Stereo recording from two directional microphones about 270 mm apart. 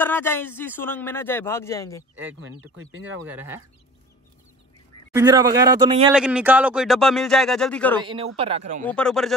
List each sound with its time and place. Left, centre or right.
0.0 s a man's voice: centre
2.2 s speech: right
3.2 s a man's voice: centre
5.1 s a man's voice: centre
6.1 s a man's voice: centre
8.0 s a man's voice: centre
8.8 s a man's voice: centre